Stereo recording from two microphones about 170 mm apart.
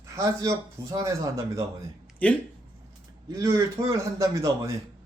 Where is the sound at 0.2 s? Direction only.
20° right (ahead or behind).